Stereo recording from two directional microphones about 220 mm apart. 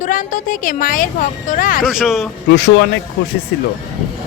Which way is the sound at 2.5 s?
55° left (ahead or behind).